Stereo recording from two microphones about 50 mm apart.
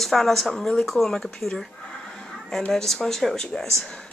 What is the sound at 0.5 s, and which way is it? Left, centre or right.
Speech, centre.